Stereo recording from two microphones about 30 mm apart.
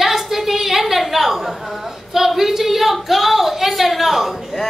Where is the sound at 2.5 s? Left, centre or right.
Centre.